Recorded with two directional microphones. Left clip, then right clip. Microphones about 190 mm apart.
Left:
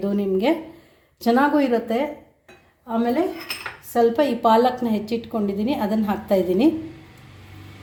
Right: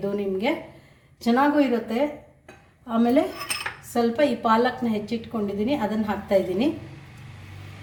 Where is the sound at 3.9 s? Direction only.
50° left (ahead or behind).